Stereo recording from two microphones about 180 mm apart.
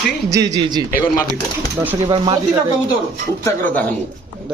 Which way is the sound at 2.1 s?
25° right (ahead or behind).